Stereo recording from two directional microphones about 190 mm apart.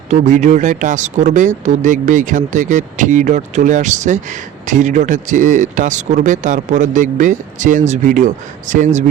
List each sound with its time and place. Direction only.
0.1 s speech: 40° right (ahead or behind)